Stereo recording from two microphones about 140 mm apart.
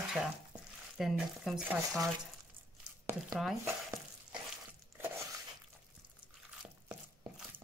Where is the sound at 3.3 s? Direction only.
Centre (ahead or behind).